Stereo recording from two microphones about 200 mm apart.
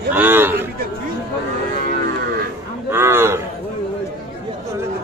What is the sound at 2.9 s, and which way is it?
Speech, 10° right (ahead or behind).